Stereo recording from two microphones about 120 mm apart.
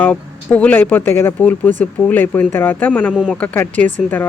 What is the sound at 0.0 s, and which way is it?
A woman's voice, 15° left (ahead or behind).